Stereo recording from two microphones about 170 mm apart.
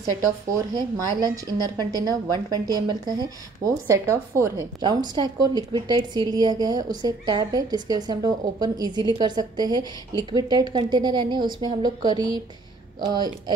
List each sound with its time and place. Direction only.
0.7 s a woman's voice: 20° right (ahead or behind)